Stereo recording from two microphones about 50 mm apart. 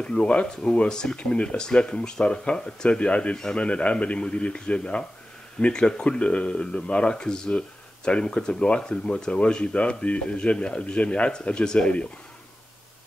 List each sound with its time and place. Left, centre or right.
0.0 s speech: left
0.8 s speech: centre